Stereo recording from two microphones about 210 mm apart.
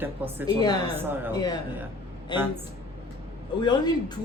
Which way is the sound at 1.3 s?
20° left (ahead or behind).